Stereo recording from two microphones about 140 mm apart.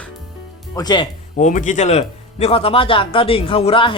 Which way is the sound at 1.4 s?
60° left (ahead or behind).